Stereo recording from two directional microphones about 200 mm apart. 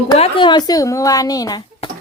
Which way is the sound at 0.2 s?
25° left (ahead or behind).